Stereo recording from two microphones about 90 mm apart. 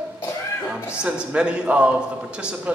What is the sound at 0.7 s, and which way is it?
A man's voice, 10° right (ahead or behind).